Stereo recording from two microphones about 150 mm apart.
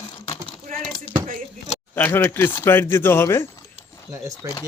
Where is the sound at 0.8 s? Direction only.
5° left (ahead or behind).